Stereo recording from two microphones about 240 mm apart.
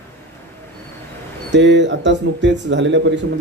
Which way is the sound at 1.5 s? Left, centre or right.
Right.